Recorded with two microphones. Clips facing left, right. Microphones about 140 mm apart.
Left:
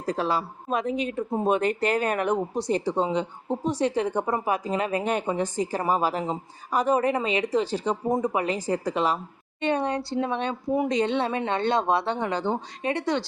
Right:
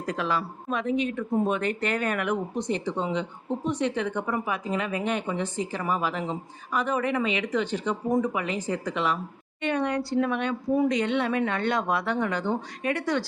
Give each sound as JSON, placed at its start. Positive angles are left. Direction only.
{"t": 0.0, "sound": "a woman's voice", "side_deg": 30}